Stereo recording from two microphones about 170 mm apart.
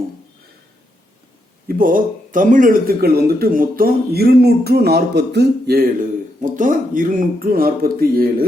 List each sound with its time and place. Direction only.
1.6 s a man's voice: 55° right (ahead or behind)
6.4 s a man's voice: 50° right (ahead or behind)